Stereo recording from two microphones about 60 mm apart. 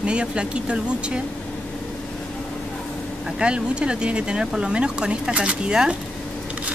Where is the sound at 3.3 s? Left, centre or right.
Centre.